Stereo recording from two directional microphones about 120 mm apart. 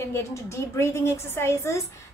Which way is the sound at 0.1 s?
25° left (ahead or behind).